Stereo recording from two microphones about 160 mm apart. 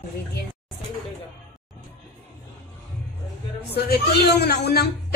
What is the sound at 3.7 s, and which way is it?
Speech, 80° left.